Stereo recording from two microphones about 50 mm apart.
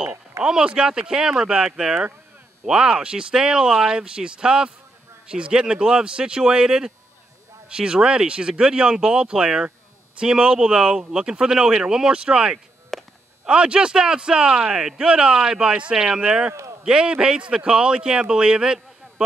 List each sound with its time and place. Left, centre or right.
0.4 s speech: centre
12.9 s a sound: centre
13.5 s speech: right